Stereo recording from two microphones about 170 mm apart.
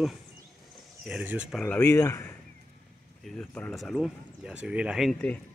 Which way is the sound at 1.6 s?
10° left (ahead or behind).